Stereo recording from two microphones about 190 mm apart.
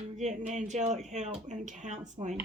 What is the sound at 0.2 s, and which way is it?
A woman's voice, 40° right (ahead or behind).